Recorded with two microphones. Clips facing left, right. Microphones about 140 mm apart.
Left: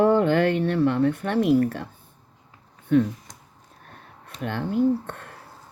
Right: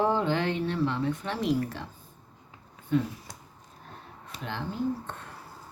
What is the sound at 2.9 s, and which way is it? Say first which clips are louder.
Speech: left 7 dB; 65° left (ahead or behind).